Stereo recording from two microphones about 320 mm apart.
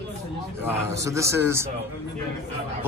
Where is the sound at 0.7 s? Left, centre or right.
Centre.